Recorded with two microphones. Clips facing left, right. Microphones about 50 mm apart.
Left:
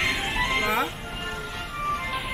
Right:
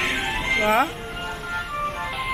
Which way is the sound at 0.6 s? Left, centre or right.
Right.